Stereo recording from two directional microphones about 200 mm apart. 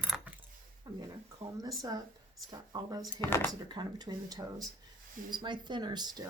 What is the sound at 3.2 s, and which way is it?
Speech, 15° left (ahead or behind).